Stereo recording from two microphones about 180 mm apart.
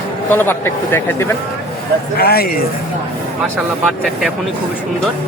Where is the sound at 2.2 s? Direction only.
60° left (ahead or behind).